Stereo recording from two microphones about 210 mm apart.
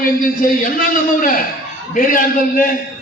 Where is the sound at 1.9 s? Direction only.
40° left (ahead or behind).